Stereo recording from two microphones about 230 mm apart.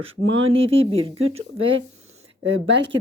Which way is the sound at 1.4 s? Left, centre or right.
Right.